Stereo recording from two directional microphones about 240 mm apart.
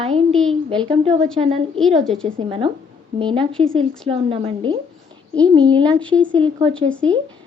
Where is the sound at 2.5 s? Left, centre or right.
Right.